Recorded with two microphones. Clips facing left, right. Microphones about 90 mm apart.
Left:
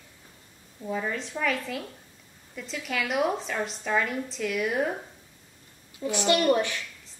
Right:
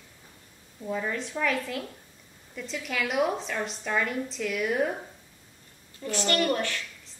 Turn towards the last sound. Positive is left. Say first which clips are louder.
# left 4 dB
turn(degrees=15)  # may be behind; listen again after turning